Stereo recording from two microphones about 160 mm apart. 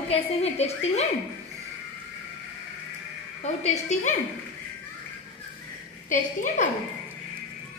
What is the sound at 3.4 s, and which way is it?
Speech, 45° left (ahead or behind).